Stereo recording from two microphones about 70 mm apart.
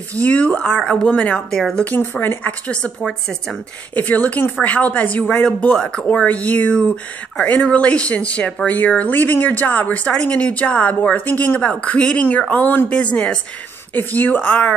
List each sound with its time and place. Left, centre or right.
0.2 s speech: left; by 1.9 s centre
2.0 s speech: left
3.0 s a woman's voice: centre
3.9 s speech: left
13.9 s speech: left